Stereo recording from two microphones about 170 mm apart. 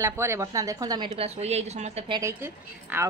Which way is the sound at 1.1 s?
40° right (ahead or behind).